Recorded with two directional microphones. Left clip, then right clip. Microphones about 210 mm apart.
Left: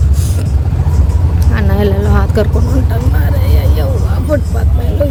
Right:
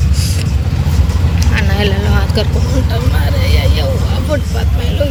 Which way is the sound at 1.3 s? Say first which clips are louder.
Even; 30° left (ahead or behind).